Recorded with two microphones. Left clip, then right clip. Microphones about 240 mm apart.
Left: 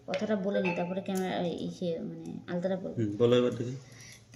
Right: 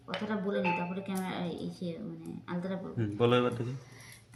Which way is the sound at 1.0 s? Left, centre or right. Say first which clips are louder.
Left 5 dB; centre.